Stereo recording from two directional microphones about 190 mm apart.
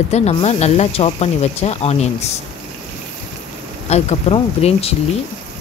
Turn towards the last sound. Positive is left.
turn(degrees=30)  # may be behind; listen again after turning